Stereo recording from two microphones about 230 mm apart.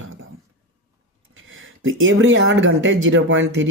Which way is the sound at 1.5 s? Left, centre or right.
Right.